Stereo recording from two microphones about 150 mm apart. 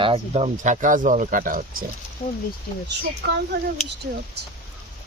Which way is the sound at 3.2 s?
90° right.